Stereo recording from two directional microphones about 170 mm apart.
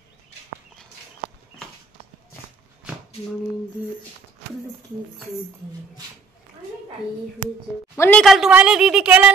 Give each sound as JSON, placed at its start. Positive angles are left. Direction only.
{"t": 7.9, "sound": "speech", "side_deg": 10}
{"t": 8.3, "sound": "a woman's voice", "side_deg": -5}